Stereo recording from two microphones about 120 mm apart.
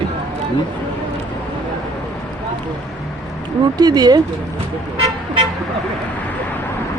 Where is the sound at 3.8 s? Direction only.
35° right (ahead or behind).